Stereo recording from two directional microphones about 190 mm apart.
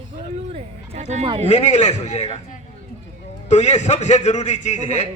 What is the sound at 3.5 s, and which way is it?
A man's voice, 35° left (ahead or behind).